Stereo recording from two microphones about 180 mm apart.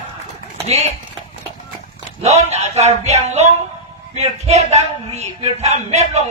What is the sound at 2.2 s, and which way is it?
Speech, 35° right (ahead or behind).